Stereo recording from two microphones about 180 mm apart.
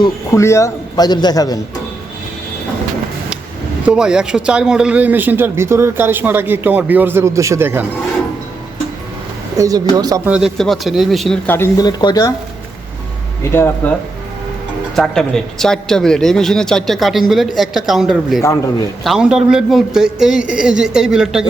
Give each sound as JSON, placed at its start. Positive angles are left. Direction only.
{"t": 0.0, "sound": "a man's voice", "side_deg": 15}
{"t": 3.8, "sound": "a man's voice", "side_deg": -5}
{"t": 9.6, "sound": "speech", "side_deg": -20}
{"t": 10.2, "sound": "a man's voice", "side_deg": -5}
{"t": 13.4, "sound": "speech", "side_deg": 15}
{"t": 14.9, "sound": "a man's voice", "side_deg": 0}